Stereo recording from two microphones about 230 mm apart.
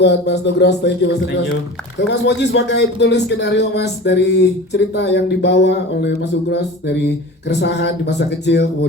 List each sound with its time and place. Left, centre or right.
0.0 s speech: left